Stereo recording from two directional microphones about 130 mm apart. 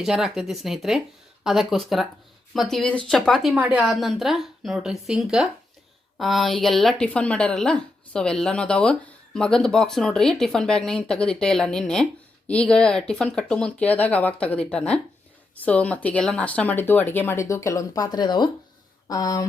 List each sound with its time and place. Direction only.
0.0 s speech: 5° right (ahead or behind)
3.5 s a woman's voice: 10° right (ahead or behind); by 19.5 s 30° left (ahead or behind)